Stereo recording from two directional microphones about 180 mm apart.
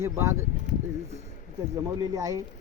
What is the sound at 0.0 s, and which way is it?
Speech, 15° right (ahead or behind).